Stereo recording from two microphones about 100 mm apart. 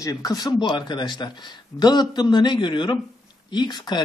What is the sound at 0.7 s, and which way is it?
Speech, 50° left (ahead or behind).